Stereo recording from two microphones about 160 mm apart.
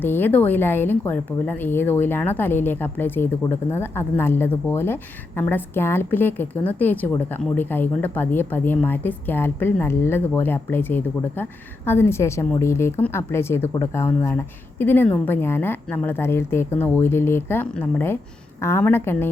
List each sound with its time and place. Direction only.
0.0 s a woman's voice: 10° left (ahead or behind)